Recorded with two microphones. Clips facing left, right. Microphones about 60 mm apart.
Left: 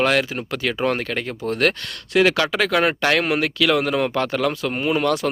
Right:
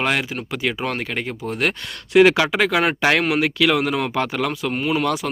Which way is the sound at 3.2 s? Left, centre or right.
Centre.